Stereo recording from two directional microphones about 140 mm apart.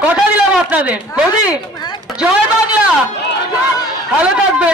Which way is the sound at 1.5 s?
30° left (ahead or behind).